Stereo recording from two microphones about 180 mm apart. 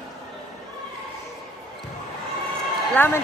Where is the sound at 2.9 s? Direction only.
10° left (ahead or behind).